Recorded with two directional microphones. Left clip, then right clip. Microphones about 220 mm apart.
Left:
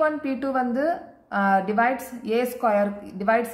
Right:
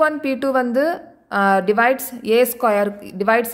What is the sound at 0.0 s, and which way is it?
A woman's voice, 45° right (ahead or behind).